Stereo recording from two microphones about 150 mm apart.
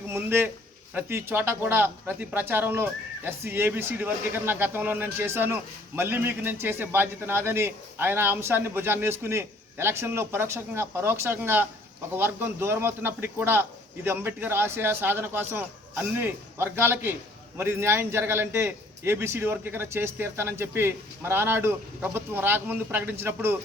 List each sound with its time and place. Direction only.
0.1 s a man's voice: 15° right (ahead or behind)